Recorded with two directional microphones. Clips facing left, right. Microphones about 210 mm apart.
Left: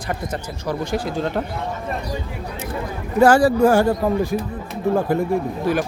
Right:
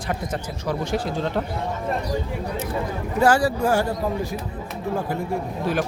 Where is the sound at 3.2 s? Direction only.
50° left (ahead or behind).